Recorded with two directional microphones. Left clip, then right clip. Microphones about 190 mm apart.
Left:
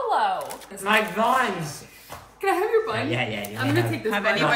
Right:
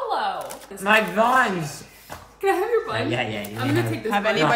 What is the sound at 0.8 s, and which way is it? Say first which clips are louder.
Speech: right 3 dB; 60° right (ahead or behind).